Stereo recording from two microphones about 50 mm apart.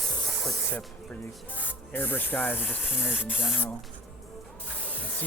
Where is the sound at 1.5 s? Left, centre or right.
Left.